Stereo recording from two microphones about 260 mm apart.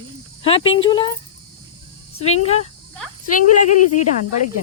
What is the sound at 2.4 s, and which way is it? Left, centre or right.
Speech, left.